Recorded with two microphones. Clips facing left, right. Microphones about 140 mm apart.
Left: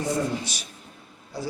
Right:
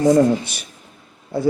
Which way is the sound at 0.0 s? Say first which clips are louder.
Right 13 dB; 90° right.